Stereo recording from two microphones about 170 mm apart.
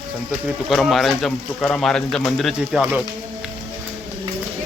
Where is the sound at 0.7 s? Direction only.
Centre (ahead or behind).